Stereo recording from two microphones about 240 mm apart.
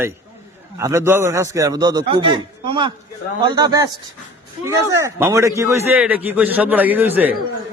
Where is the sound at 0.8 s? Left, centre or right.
Centre.